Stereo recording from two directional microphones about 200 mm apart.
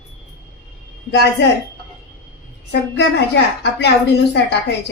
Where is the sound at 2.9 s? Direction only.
60° left (ahead or behind).